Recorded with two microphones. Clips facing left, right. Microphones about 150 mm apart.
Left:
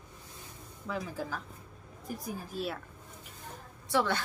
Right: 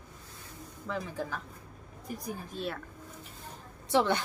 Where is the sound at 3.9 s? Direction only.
20° right (ahead or behind).